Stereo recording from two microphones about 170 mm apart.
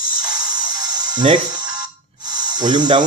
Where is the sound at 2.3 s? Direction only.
25° right (ahead or behind).